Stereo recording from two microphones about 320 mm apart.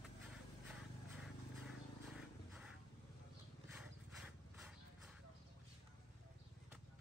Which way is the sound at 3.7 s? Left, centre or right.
Centre.